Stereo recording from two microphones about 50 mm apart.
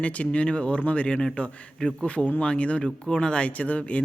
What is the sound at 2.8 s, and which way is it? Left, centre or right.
Speech, centre.